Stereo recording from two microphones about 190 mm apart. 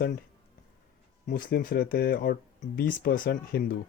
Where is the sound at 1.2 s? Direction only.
50° left (ahead or behind).